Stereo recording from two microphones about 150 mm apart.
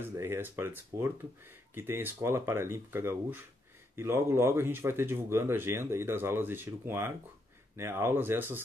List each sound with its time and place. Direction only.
0.0 s speech: 15° right (ahead or behind)